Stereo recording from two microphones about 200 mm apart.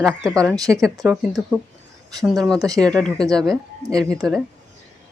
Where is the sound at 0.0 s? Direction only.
5° left (ahead or behind).